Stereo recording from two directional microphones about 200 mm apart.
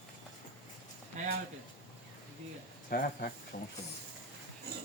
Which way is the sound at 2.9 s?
45° left (ahead or behind).